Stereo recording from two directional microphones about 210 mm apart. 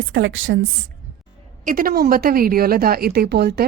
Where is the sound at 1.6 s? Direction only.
40° right (ahead or behind).